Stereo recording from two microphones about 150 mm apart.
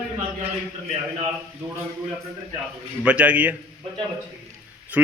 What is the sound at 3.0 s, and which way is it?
Speech, 10° right (ahead or behind).